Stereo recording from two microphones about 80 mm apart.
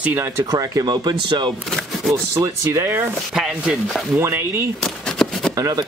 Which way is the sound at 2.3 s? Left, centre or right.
Right.